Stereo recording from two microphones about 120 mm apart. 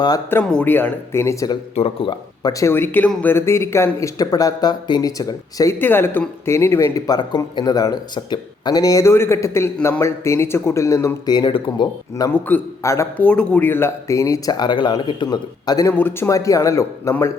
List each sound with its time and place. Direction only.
0.4 s speech: 10° left (ahead or behind); by 1.5 s 25° left (ahead or behind)
1.7 s a man's voice: 60° left (ahead or behind)
2.0 s speech: 30° left (ahead or behind)
5.8 s speech: 15° left (ahead or behind); by 11.9 s 40° left (ahead or behind)
12.3 s a man's voice: 15° left (ahead or behind)
12.8 s speech: 25° left (ahead or behind)
13.1 s speech: 10° left (ahead or behind); by 15.9 s 35° left (ahead or behind)
15.9 s speech: 20° left (ahead or behind)